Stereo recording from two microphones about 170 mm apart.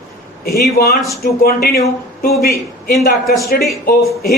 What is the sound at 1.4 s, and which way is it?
A man's voice, 65° left (ahead or behind).